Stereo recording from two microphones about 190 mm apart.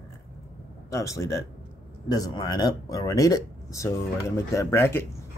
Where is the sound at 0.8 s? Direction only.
15° left (ahead or behind).